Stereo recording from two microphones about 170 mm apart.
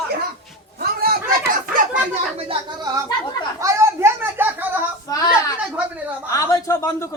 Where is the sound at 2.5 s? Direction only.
20° right (ahead or behind).